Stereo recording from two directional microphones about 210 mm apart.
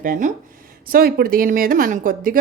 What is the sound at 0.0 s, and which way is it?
A woman's voice, 40° right (ahead or behind).